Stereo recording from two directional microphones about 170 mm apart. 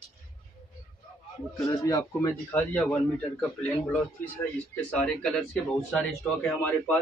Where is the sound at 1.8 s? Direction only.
20° left (ahead or behind).